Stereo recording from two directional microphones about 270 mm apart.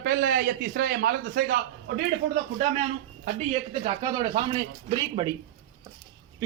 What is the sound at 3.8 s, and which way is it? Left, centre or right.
Speech, centre.